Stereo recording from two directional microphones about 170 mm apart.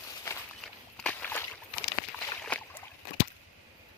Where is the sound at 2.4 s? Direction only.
10° left (ahead or behind).